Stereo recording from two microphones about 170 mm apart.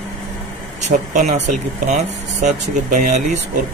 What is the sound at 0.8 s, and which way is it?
Speech, 45° right (ahead or behind).